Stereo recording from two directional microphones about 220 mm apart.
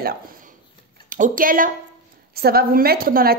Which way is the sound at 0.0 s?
40° right (ahead or behind).